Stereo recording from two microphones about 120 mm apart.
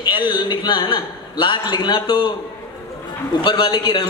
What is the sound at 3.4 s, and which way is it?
Speech, 40° left (ahead or behind).